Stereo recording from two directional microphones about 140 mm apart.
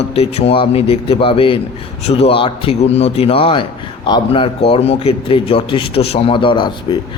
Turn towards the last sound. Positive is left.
turn(degrees=35)  # may be behind; listen again after turning